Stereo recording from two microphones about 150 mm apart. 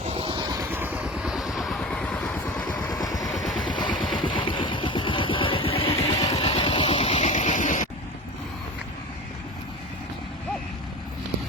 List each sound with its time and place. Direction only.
0.1 s vehicle: 35° right (ahead or behind)
0.7 s vehicle: 10° right (ahead or behind); by 2.6 s 5° left (ahead or behind)
2.9 s vehicle: 25° left (ahead or behind)
3.3 s vehicle: centre (ahead or behind)
4.2 s music: 35° left (ahead or behind); by 7.9 s 55° left (ahead or behind)